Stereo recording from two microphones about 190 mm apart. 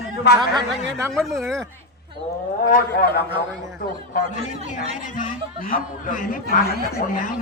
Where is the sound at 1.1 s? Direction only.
Centre (ahead or behind).